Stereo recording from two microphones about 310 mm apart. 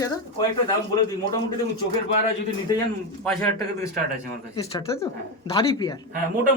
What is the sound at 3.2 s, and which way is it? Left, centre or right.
Speech, centre.